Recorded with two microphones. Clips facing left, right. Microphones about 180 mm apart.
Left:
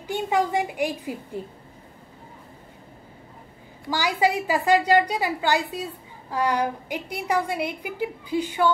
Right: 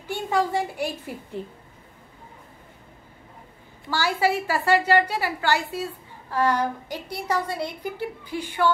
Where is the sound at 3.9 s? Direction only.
15° left (ahead or behind).